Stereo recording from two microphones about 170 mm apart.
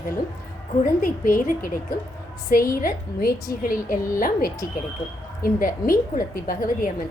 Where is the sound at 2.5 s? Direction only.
55° left (ahead or behind).